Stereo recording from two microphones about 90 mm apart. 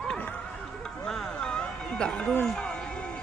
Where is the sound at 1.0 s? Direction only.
5° left (ahead or behind).